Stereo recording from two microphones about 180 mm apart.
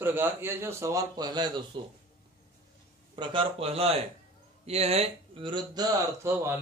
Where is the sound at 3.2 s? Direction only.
30° right (ahead or behind).